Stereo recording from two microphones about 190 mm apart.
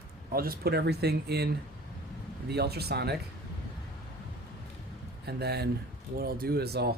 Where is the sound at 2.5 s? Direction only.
55° right (ahead or behind).